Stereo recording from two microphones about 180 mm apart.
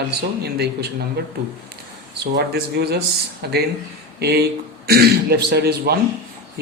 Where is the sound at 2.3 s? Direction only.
60° right (ahead or behind).